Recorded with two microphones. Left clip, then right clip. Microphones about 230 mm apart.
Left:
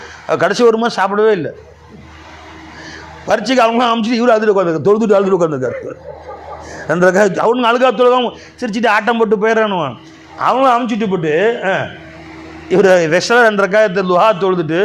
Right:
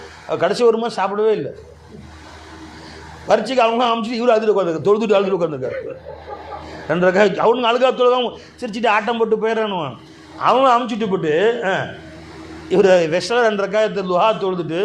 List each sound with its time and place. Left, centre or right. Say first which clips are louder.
0.3 s a man's voice: left 4 dB; left
3.2 s a man's voice: left 3 dB; left
7.1 s a man's voice: even; left